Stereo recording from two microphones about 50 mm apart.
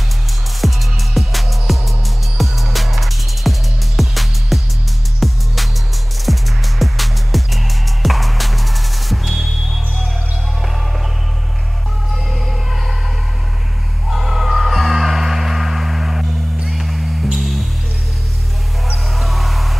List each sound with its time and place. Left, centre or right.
0.6 s music: centre
12.3 s music: centre
14.1 s music: centre
19.1 s music: centre